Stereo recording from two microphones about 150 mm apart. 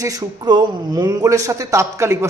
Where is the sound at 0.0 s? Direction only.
25° right (ahead or behind).